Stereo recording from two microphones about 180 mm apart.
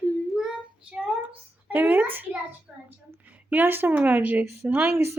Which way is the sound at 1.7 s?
10° right (ahead or behind).